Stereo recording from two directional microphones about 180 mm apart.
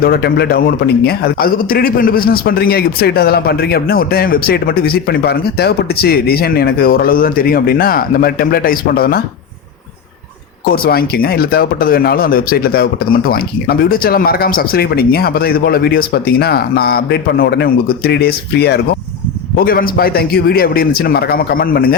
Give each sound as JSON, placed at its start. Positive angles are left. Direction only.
{"t": 0.0, "sound": "a man's voice", "side_deg": 60}
{"t": 10.7, "sound": "a man's voice", "side_deg": 60}
{"t": 19.5, "sound": "a man's voice", "side_deg": 55}